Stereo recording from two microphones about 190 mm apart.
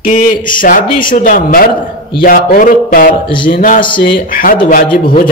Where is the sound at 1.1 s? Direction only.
45° left (ahead or behind).